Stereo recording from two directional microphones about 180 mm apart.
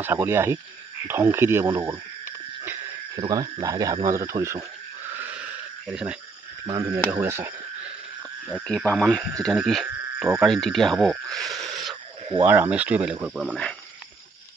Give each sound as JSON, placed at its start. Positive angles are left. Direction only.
{"t": 0.0, "sound": "speech", "side_deg": -15}
{"t": 3.2, "sound": "speech", "side_deg": -20}
{"t": 5.1, "sound": "a sound", "side_deg": -10}
{"t": 6.6, "sound": "speech", "side_deg": -20}
{"t": 8.9, "sound": "speech", "side_deg": 5}